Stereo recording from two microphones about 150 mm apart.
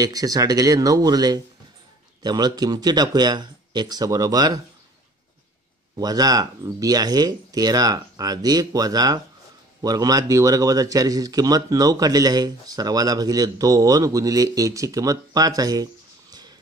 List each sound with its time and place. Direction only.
0.0 s a man's voice: 25° right (ahead or behind)
5.9 s a man's voice: 25° right (ahead or behind)